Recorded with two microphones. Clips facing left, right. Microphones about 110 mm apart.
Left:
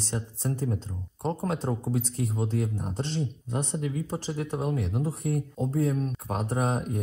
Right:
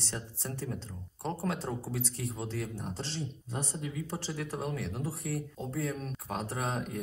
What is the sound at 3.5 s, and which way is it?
Speech, 65° left (ahead or behind).